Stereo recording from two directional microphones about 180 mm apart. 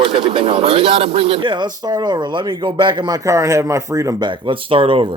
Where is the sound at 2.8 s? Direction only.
20° right (ahead or behind).